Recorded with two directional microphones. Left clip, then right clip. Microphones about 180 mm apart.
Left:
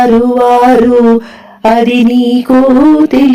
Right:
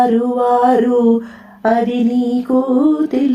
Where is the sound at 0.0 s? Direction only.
30° left (ahead or behind).